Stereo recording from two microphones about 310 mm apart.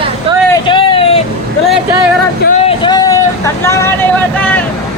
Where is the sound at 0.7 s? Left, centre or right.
Centre.